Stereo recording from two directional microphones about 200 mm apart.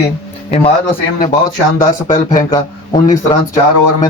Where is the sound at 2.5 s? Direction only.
20° left (ahead or behind).